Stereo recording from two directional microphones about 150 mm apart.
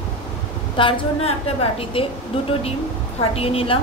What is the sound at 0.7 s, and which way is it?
A woman's voice, 35° left (ahead or behind).